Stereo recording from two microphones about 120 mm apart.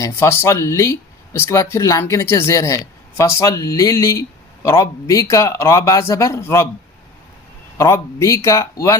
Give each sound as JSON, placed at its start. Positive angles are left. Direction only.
{"t": 0.0, "sound": "speech", "side_deg": 20}
{"t": 7.8, "sound": "speech", "side_deg": 25}